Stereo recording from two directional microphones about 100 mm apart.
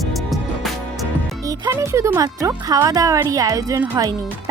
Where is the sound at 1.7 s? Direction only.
30° right (ahead or behind).